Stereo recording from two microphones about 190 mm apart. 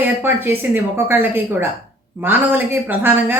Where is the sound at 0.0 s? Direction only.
10° right (ahead or behind).